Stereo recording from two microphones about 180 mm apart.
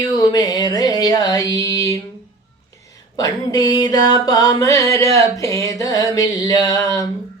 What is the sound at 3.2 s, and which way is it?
Music, 20° left (ahead or behind).